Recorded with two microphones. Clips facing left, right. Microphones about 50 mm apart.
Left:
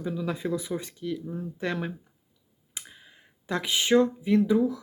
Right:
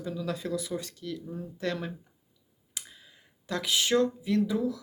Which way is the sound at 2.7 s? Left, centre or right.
Centre.